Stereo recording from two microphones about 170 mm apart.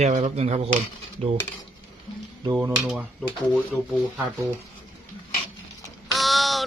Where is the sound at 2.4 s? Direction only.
15° right (ahead or behind).